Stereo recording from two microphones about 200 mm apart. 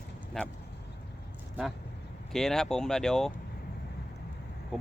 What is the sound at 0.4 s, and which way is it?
Speech, 5° left (ahead or behind).